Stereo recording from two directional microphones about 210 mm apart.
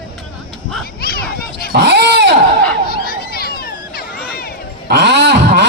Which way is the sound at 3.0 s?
45° left (ahead or behind).